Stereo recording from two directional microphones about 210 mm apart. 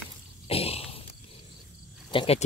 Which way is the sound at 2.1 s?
25° left (ahead or behind).